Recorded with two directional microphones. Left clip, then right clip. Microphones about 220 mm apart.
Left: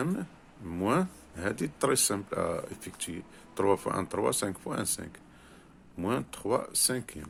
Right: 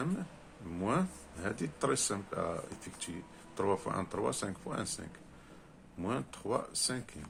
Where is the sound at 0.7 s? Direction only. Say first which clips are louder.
Left 5 dB; 40° left (ahead or behind).